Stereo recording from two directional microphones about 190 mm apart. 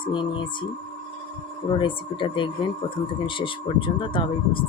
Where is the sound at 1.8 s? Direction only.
25° left (ahead or behind).